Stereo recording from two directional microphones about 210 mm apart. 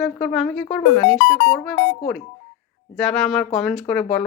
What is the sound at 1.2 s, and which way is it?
Speech, 60° left (ahead or behind).